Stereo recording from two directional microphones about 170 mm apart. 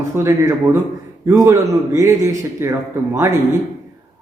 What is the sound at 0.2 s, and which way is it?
A man's voice, 15° right (ahead or behind).